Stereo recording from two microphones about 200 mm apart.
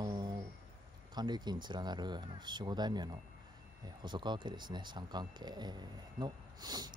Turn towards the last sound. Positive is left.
turn(degrees=-20)  # may be behind; listen again after turning